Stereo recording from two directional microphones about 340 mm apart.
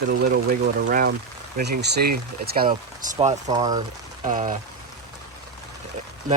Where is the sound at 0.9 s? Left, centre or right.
Right.